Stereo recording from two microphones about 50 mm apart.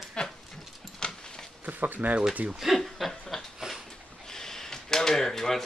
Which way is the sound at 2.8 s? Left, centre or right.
Centre.